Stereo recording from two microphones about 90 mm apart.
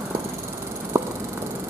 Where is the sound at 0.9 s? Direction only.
35° right (ahead or behind).